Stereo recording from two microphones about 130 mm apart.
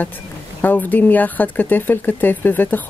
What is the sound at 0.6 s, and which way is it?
Speech, 15° left (ahead or behind).